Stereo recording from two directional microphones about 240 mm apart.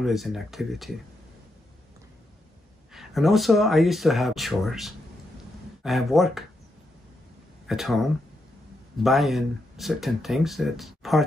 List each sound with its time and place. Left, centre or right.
0.0 s speech: centre
2.9 s speech: centre
7.6 s speech: centre